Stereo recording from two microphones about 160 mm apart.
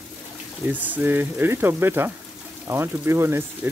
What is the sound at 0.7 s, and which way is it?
Speech, 10° right (ahead or behind).